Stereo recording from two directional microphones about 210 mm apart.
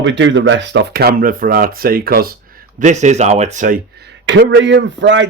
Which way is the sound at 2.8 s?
35° right (ahead or behind).